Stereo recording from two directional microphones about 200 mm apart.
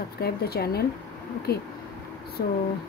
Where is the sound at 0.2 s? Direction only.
50° left (ahead or behind).